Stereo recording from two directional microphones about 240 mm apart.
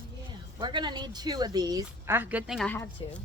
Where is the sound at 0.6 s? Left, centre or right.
Centre.